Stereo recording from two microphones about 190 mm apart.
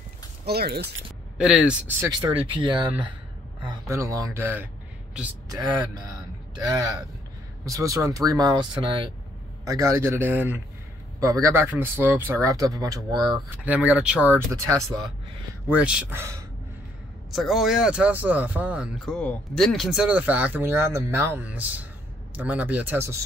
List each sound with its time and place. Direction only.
0.5 s speech: 55° right (ahead or behind)
1.4 s speech: 5° right (ahead or behind)
2.0 s speech: 20° right (ahead or behind)
6.0 s a sound: 20° right (ahead or behind)
7.6 s speech: 15° right (ahead or behind)
13.7 s speech: 5° right (ahead or behind)
17.3 s speech: centre (ahead or behind)